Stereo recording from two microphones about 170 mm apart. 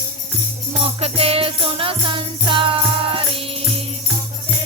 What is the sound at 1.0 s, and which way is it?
Jingle bell, 35° right (ahead or behind).